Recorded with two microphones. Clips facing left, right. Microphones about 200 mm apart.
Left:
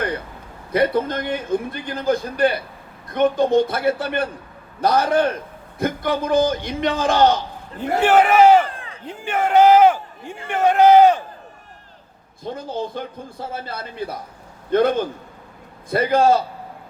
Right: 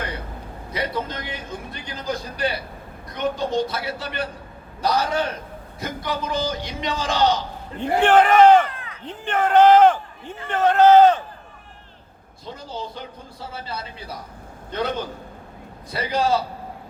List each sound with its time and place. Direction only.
0.7 s a man's voice: 55° left (ahead or behind)
7.8 s a man's voice: 10° left (ahead or behind)
8.6 s a sound: 30° left (ahead or behind)
9.0 s a man's voice: 10° left (ahead or behind)
12.5 s a man's voice: 50° left (ahead or behind)